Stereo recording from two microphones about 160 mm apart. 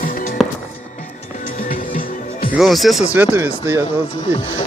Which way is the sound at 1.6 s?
60° left (ahead or behind).